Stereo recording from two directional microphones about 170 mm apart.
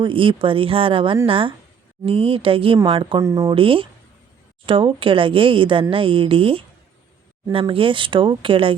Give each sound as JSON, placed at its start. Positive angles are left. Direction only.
{"t": 0.0, "sound": "speech", "side_deg": -30}
{"t": 3.2, "sound": "speech", "side_deg": -15}
{"t": 3.5, "sound": "speech", "side_deg": -30}